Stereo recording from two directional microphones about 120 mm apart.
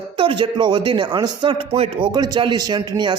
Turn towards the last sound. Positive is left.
turn(degrees=-40)  # may be behind; listen again after turning